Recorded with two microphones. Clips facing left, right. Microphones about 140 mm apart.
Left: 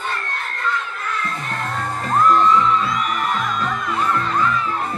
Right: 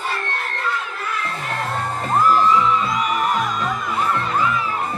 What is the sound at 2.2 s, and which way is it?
Music, 5° right (ahead or behind).